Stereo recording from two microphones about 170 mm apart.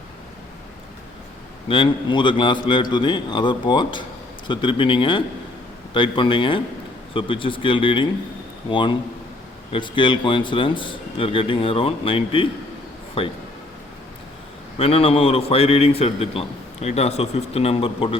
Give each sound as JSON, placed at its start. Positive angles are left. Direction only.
{"t": 1.6, "sound": "a man's voice", "side_deg": 30}
{"t": 14.8, "sound": "a man's voice", "side_deg": 35}